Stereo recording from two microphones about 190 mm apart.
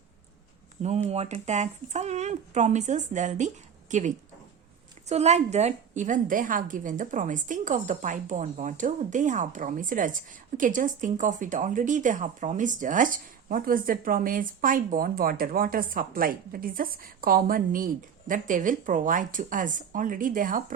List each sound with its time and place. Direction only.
0.8 s a woman's voice: 35° right (ahead or behind)